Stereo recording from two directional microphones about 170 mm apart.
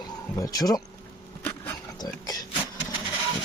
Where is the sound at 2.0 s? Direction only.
20° left (ahead or behind).